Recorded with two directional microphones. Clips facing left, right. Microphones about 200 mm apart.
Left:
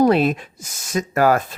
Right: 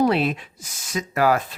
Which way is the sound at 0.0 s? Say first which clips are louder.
Left 4 dB; 45° left (ahead or behind).